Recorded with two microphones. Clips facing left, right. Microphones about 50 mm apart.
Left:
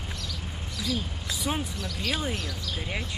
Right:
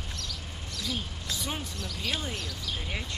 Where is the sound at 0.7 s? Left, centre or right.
Centre.